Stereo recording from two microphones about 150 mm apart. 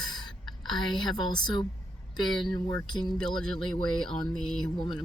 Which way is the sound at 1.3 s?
30° left (ahead or behind).